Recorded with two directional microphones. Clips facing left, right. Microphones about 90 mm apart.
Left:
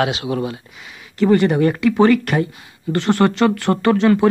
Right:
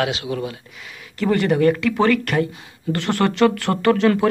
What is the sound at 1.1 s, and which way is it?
Speech, 10° left (ahead or behind).